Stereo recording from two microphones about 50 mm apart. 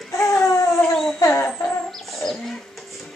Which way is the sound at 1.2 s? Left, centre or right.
Left.